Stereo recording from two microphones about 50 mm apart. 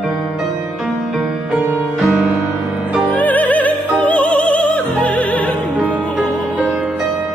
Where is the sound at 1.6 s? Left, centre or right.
Right.